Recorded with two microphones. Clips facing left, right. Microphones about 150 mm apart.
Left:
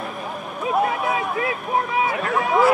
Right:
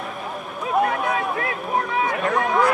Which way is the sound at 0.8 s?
5° left (ahead or behind).